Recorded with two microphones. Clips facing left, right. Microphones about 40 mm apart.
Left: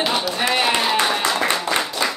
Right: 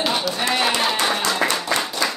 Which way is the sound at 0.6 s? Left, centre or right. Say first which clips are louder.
Left 2 dB; centre.